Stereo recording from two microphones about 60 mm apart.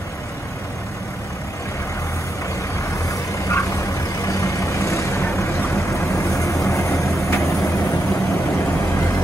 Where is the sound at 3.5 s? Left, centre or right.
Left.